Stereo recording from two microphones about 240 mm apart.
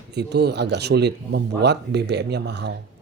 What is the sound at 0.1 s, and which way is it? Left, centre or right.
A man's voice, right.